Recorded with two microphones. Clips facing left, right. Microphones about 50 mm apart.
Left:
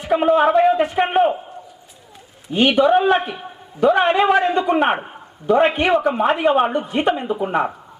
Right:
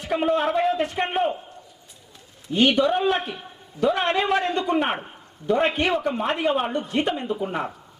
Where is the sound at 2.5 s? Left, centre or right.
Centre.